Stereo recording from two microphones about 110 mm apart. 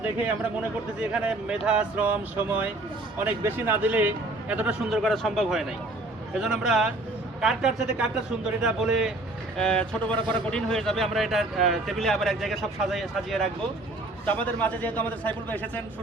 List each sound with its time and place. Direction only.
0.9 s speech: 10° right (ahead or behind)
4.9 s a man's voice: centre (ahead or behind)
9.6 s a man's voice: 10° left (ahead or behind)
14.3 s a man's voice: 15° left (ahead or behind)